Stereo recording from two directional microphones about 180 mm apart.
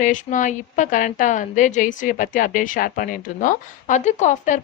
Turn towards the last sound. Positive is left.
turn(degrees=45)  # may be behind; listen again after turning